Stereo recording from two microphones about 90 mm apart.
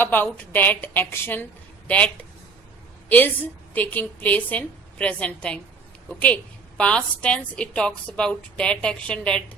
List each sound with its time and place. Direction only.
0.0 s a woman's voice: 20° left (ahead or behind)
3.1 s a woman's voice: 15° left (ahead or behind)